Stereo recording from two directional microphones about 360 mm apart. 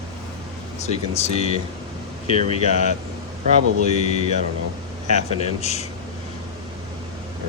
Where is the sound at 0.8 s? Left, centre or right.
Centre.